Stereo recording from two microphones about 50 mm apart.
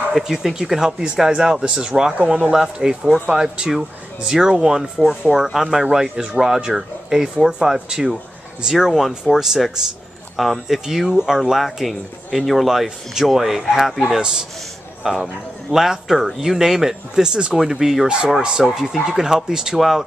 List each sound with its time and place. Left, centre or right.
0.1 s a man's voice: centre
15.0 s a man's voice: centre